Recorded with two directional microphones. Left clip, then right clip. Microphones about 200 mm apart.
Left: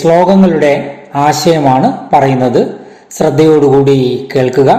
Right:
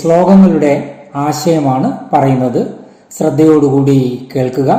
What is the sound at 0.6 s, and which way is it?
A man's voice, 20° left (ahead or behind).